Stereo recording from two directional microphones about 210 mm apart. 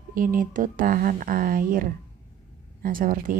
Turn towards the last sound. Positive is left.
turn(degrees=-40)  # may be behind; listen again after turning